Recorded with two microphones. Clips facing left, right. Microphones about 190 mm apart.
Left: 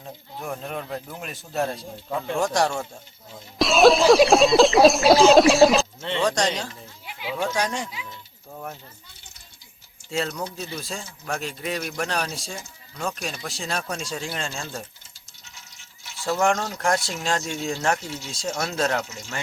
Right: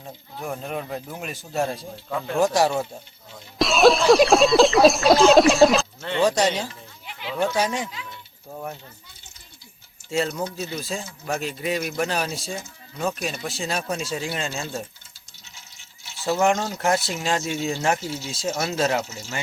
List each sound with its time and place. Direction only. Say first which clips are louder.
0.0 s speech: right 1 dB; centre (ahead or behind)
2.0 s speech: even; 15° left (ahead or behind)
2.3 s speech: right 3 dB; 5° right (ahead or behind)
7.0 s a sound: left 1 dB; 10° left (ahead or behind)
7.4 s speech: right 3 dB; 5° right (ahead or behind)
8.4 s pulleys: right 3 dB; 5° right (ahead or behind)
10.1 s speech: right 3 dB; centre (ahead or behind)
16.2 s speech: right 2 dB; 5° right (ahead or behind)